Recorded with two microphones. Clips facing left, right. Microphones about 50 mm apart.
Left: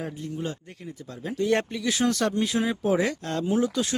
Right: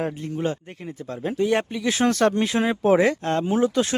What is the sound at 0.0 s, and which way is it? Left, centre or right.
Speech, right.